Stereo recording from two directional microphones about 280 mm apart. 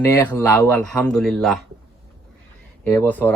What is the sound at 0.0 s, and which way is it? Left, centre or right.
Speech, centre.